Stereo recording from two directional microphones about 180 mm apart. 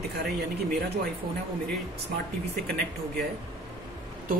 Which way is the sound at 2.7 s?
65° right (ahead or behind).